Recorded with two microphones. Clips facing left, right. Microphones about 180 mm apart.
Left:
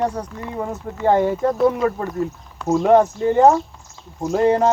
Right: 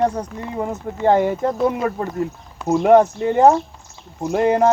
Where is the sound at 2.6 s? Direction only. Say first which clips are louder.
Right 1 dB; 15° right (ahead or behind).